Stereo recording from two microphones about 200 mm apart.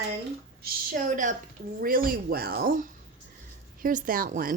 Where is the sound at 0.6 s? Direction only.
40° right (ahead or behind).